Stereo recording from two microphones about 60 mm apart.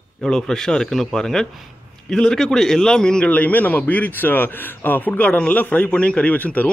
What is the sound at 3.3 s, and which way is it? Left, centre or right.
A man's voice, left.